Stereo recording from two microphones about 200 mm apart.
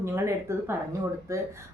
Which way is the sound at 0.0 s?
15° right (ahead or behind).